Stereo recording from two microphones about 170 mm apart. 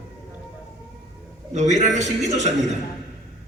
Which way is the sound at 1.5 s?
45° right (ahead or behind).